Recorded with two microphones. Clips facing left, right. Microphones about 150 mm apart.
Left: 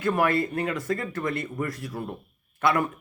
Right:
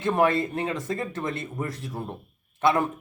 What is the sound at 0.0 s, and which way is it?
Speech, 25° right (ahead or behind).